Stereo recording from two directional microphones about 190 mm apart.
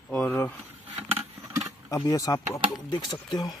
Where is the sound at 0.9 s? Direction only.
10° right (ahead or behind).